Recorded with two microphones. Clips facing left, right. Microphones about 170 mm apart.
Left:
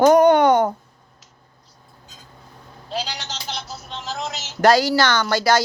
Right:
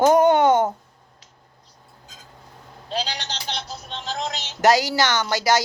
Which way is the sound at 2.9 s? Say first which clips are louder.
Even; centre (ahead or behind).